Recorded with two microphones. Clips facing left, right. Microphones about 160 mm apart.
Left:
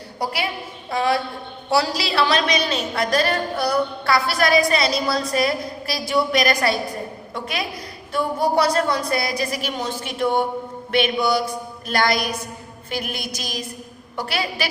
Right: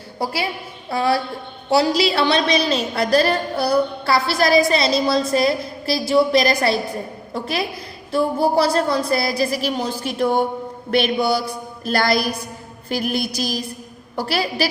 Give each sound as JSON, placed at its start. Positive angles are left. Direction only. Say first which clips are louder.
{"t": 0.9, "sound": "a woman's voice", "louder": "right 2 dB", "side_deg": -35}
{"t": 1.7, "sound": "a woman's voice", "louder": "right 4 dB", "side_deg": -20}